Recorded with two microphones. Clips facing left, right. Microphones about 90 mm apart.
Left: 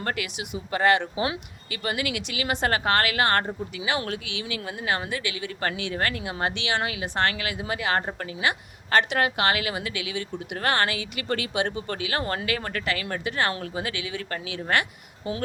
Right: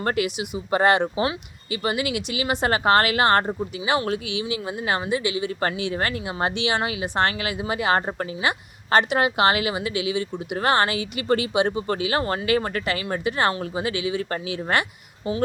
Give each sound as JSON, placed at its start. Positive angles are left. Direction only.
{"t": 0.0, "sound": "a woman's voice", "side_deg": -25}